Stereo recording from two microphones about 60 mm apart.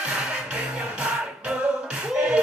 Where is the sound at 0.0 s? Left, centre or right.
Centre.